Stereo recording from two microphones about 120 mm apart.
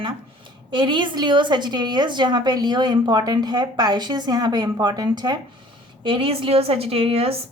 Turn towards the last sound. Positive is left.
turn(degrees=-55)  # may be behind; listen again after turning